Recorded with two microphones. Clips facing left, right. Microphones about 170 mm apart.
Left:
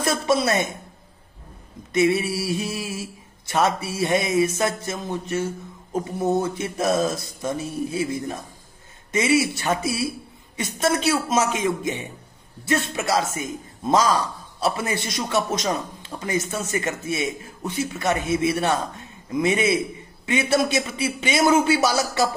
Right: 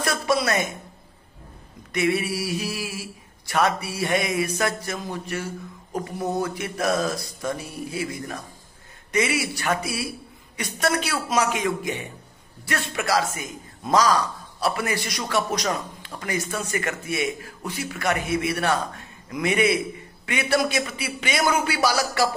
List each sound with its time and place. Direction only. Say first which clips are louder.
0.0 s a woman's voice: left 2 dB; 25° left (ahead or behind)
1.9 s a man's voice: left 3 dB; 25° left (ahead or behind)